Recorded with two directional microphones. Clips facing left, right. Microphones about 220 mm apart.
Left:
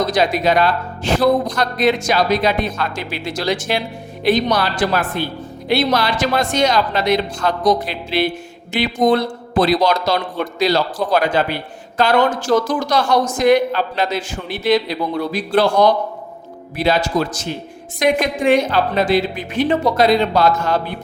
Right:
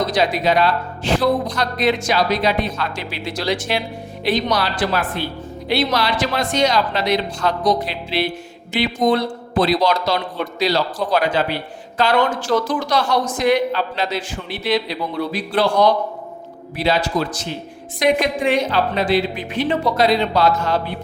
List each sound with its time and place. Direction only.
0.1 s speech: 50° left (ahead or behind)